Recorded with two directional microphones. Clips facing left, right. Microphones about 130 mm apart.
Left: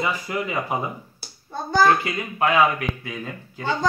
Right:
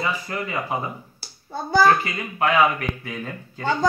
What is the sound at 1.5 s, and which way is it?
Speech, 10° right (ahead or behind).